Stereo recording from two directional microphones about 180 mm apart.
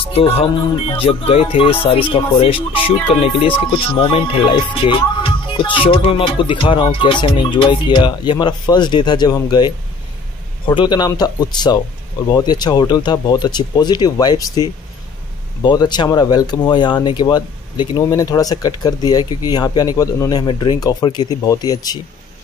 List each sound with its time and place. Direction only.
0.0 s speech: 30° left (ahead or behind)